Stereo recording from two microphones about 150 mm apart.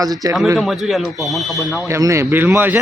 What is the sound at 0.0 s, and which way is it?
Speech, 25° right (ahead or behind).